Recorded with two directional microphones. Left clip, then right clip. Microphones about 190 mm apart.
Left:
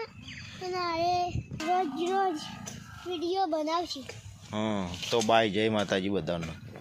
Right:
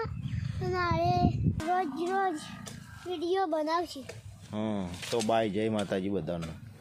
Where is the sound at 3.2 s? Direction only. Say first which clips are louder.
Even; 15° right (ahead or behind).